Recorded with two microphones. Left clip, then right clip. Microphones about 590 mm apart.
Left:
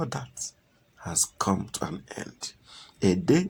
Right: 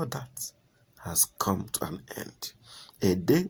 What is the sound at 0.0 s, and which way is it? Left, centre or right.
Speech, right.